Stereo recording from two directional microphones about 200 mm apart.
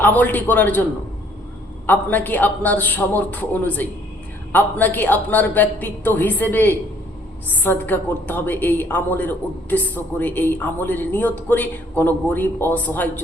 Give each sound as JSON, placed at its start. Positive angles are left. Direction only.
{"t": 0.0, "sound": "a woman's voice", "side_deg": 10}
{"t": 1.9, "sound": "a woman's voice", "side_deg": 10}